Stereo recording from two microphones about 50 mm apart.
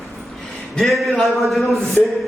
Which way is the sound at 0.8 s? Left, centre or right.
Centre.